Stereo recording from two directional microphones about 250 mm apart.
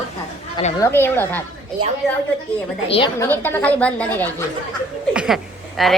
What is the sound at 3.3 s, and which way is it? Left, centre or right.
A woman's voice, centre.